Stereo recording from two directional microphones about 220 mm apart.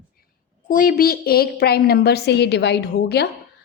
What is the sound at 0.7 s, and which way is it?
A woman's voice, 40° left (ahead or behind).